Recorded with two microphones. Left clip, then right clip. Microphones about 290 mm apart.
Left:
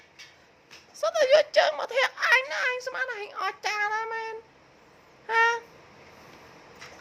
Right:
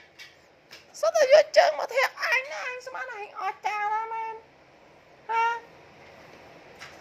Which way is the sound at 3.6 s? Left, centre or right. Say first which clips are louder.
Right 1 dB; left.